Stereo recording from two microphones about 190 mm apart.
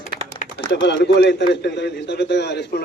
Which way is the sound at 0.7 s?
65° left (ahead or behind).